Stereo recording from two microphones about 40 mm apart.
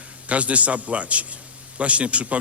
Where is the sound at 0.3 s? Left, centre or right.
Right.